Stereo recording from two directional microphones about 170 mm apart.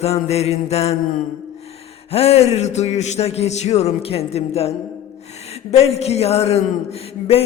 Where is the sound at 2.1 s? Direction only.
35° left (ahead or behind).